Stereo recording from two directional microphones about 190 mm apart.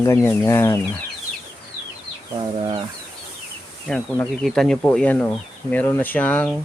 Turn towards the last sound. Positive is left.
turn(degrees=5)  # may be behind; listen again after turning